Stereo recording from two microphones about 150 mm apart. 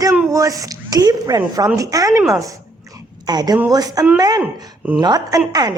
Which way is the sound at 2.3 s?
20° right (ahead or behind).